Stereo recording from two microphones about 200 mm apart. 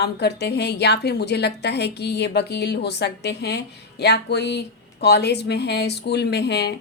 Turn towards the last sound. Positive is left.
turn(degrees=55)  # may be behind; listen again after turning